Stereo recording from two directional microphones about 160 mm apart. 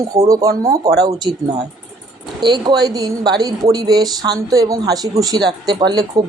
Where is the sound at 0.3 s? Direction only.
20° right (ahead or behind).